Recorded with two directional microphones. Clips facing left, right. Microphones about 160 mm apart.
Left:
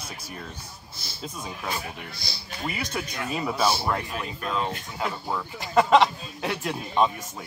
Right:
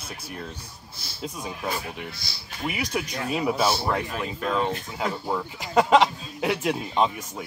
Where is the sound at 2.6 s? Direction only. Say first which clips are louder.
Right 3 dB; 10° right (ahead or behind).